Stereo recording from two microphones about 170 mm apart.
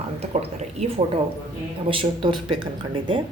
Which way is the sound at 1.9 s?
30° right (ahead or behind).